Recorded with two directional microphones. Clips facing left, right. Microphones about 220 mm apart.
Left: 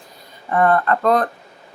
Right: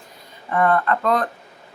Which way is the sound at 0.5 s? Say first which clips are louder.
Left 2 dB; 40° left (ahead or behind).